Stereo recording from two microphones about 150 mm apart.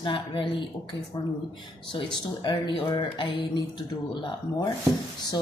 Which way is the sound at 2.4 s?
30° left (ahead or behind).